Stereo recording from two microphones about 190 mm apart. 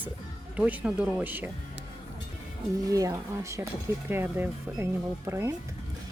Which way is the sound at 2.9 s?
15° right (ahead or behind).